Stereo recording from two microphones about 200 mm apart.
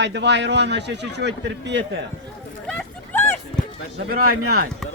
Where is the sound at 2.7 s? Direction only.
5° left (ahead or behind).